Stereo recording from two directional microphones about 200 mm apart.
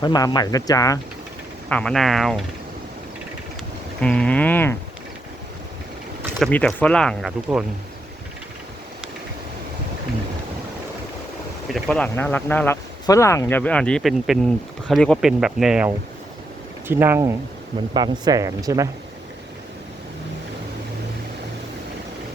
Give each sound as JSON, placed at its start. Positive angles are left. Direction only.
{"t": 0.0, "sound": "speech", "side_deg": 20}
{"t": 1.7, "sound": "speech", "side_deg": 5}
{"t": 4.0, "sound": "speech", "side_deg": 5}
{"t": 6.4, "sound": "speech", "side_deg": 5}
{"t": 11.7, "sound": "speech", "side_deg": 5}
{"t": 16.9, "sound": "speech", "side_deg": -10}